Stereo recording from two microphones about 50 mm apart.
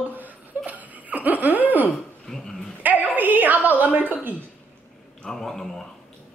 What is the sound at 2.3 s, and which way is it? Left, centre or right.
Speech, centre.